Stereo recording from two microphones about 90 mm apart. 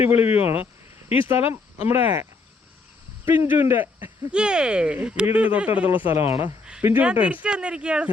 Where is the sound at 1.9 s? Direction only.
25° right (ahead or behind).